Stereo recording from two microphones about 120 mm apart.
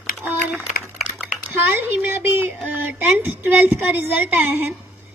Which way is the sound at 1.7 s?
20° right (ahead or behind).